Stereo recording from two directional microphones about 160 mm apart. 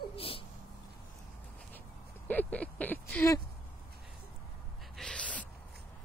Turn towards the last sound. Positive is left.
turn(degrees=5)  # may be behind; listen again after turning